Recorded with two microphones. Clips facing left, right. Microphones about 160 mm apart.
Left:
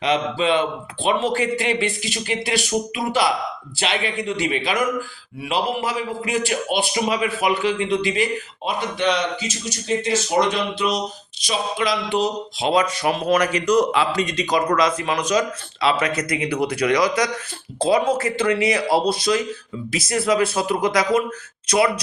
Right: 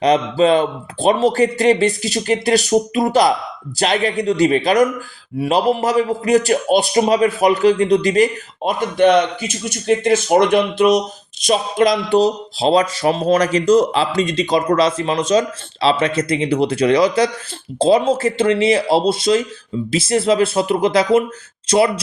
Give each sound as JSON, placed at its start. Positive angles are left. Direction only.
{"t": 0.0, "sound": "a man's voice", "side_deg": -40}